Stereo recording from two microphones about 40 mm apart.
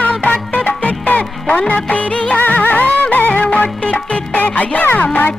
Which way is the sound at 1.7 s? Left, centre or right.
Left.